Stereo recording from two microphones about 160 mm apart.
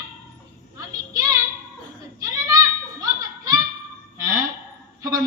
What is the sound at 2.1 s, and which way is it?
Children playing, 20° right (ahead or behind).